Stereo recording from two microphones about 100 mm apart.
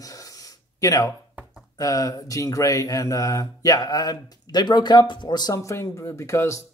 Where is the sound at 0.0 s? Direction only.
35° left (ahead or behind).